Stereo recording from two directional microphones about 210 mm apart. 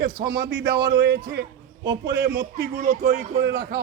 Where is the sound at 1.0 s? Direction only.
50° right (ahead or behind).